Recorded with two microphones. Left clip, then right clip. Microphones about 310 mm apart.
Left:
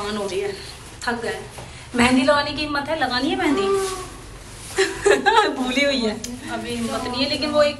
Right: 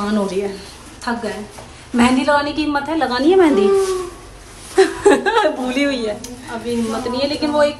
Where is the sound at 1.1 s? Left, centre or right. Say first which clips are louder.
Right 2 dB; centre.